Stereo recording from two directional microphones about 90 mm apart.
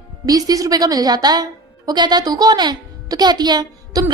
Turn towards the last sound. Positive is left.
turn(degrees=-45)  # may be behind; listen again after turning